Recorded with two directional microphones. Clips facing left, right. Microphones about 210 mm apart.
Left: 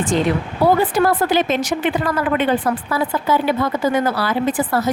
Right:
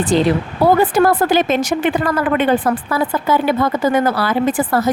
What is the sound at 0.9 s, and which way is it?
A woman's voice, 50° right (ahead or behind).